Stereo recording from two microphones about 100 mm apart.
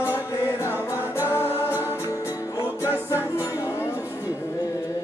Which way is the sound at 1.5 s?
20° right (ahead or behind).